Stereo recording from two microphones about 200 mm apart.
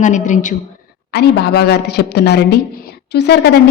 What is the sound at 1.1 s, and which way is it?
A woman's voice, 55° left (ahead or behind).